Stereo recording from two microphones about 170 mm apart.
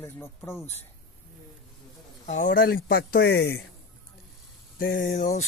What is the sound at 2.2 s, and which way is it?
Speech, 50° left (ahead or behind).